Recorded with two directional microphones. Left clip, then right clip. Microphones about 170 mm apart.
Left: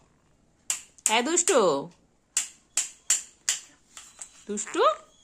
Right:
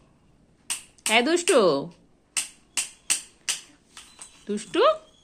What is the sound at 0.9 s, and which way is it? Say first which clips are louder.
Speech: right 4 dB; 5° left (ahead or behind).